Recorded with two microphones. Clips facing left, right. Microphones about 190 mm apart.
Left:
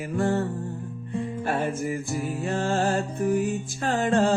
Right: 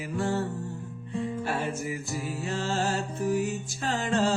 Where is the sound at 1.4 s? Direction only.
50° left (ahead or behind).